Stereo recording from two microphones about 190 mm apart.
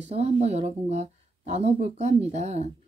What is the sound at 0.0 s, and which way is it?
Speech, 35° right (ahead or behind).